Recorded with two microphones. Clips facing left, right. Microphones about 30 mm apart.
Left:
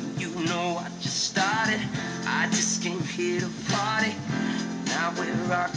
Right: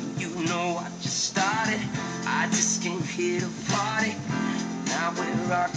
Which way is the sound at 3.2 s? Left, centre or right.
Centre.